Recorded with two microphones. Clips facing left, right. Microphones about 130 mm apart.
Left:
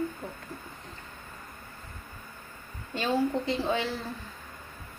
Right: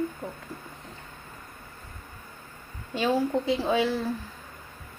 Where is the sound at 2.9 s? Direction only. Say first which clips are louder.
Right 2 dB; 10° right (ahead or behind).